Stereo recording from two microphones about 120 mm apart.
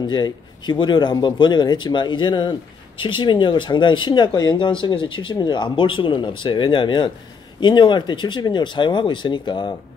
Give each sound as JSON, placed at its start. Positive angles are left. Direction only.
{"t": 0.0, "sound": "speech", "side_deg": 35}